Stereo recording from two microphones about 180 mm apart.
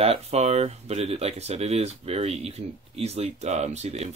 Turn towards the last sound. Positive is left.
turn(degrees=-40)  # may be behind; listen again after turning